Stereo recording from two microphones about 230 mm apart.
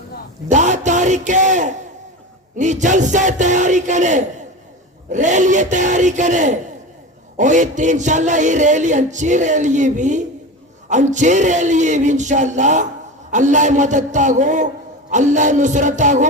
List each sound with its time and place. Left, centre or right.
0.4 s a man's voice: right